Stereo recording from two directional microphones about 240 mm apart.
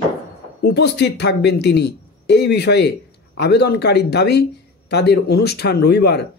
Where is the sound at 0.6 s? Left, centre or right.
Left.